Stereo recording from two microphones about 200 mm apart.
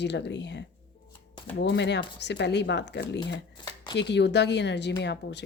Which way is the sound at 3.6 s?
25° left (ahead or behind).